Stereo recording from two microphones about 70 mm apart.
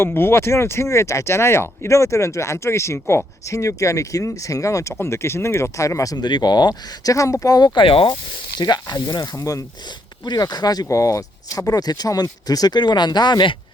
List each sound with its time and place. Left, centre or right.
0.0 s speech: left
6.1 s speech: left
7.1 s speech: left
9.3 s speech: left
10.2 s speech: left
10.8 s speech: left